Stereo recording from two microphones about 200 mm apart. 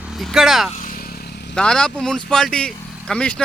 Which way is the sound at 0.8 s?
45° left (ahead or behind).